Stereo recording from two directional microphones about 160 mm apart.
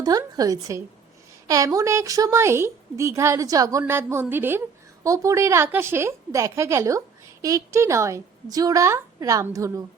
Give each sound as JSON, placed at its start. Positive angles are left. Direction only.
{"t": 0.0, "sound": "a woman's voice", "side_deg": -25}